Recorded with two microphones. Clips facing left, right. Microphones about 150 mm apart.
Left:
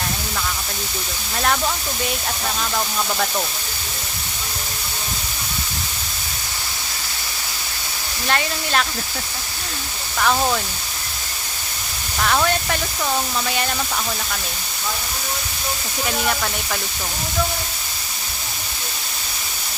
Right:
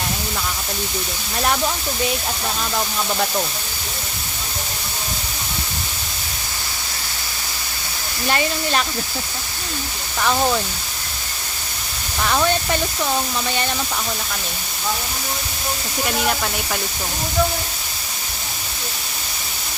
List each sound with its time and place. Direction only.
8.3 s speech: 5° right (ahead or behind)